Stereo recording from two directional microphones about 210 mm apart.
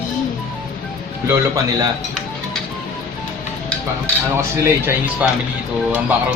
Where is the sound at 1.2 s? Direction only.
15° right (ahead or behind).